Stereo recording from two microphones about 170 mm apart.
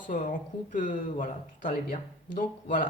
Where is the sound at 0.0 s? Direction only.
50° left (ahead or behind).